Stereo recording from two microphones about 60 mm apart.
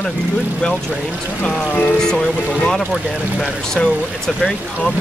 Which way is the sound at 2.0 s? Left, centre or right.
Centre.